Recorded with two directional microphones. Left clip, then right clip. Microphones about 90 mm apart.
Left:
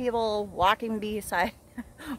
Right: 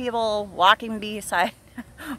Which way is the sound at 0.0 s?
25° left (ahead or behind).